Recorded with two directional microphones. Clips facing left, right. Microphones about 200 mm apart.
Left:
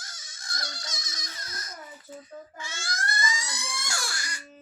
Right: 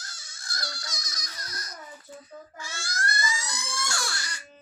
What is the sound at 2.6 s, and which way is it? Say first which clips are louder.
Baby cry: right 2 dB; 20° left (ahead or behind).